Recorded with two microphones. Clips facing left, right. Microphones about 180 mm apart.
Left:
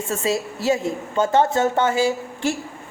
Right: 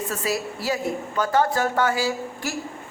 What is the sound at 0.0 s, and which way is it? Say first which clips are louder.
A woman's voice: left 3 dB; 25° left (ahead or behind).